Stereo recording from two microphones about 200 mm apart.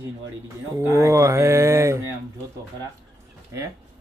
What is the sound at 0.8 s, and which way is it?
Speech, 15° right (ahead or behind).